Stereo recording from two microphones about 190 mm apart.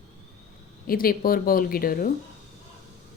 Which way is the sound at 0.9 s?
50° left (ahead or behind).